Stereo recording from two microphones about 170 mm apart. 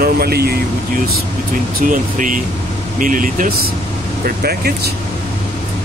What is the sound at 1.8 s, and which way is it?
Speech, 50° right (ahead or behind).